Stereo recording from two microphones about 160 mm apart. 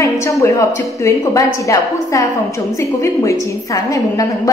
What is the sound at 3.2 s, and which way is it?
A woman's voice, 20° left (ahead or behind).